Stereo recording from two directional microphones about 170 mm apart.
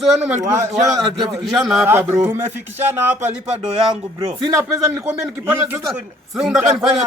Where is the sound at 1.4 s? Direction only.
Centre (ahead or behind).